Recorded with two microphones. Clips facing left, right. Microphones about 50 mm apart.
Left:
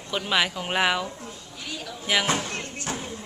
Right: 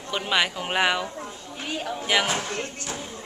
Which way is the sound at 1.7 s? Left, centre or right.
Right.